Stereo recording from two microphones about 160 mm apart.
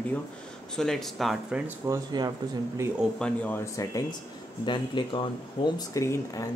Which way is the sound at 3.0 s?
5° left (ahead or behind).